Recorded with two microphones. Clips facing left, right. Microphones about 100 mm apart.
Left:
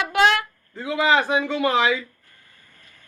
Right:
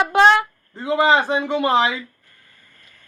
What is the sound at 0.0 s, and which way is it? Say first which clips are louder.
Speech: right 5 dB; 30° right (ahead or behind).